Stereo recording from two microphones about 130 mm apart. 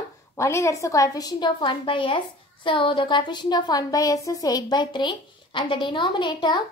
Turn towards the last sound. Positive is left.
turn(degrees=35)  # may be behind; listen again after turning